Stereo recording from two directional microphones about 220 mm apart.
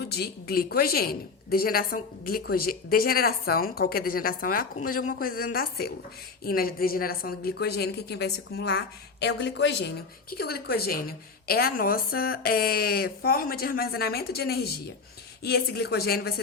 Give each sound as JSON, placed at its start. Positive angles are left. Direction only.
{"t": 0.0, "sound": "a woman's voice", "side_deg": 45}